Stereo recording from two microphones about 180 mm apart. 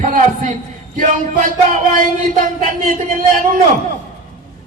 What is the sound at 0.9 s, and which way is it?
A man's voice, 45° right (ahead or behind).